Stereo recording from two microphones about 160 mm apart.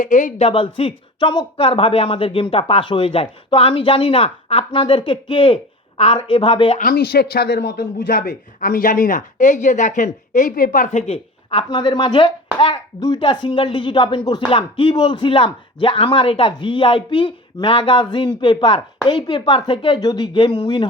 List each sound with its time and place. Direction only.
0.0 s speech: 55° left (ahead or behind)
0.4 s speech: 35° left (ahead or behind)
6.7 s speech: 65° left (ahead or behind); by 20.8 s 30° left (ahead or behind)